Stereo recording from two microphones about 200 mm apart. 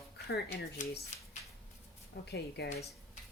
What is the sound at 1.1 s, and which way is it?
Speech, 35° left (ahead or behind).